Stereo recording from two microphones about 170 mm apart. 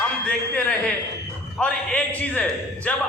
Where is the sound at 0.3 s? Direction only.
5° left (ahead or behind).